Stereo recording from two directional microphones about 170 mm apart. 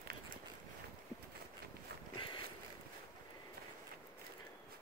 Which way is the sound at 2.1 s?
30° left (ahead or behind).